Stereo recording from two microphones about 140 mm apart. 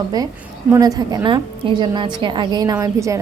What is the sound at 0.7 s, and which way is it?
A woman's voice, 25° right (ahead or behind).